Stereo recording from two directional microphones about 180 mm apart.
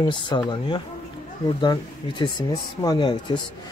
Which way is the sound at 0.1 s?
25° left (ahead or behind).